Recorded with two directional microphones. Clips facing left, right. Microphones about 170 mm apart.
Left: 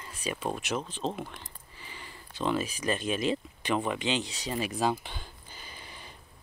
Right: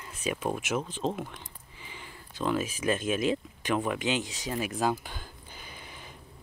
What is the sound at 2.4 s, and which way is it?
Speech, 5° right (ahead or behind).